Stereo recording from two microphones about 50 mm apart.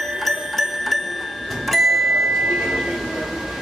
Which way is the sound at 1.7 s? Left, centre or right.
Centre.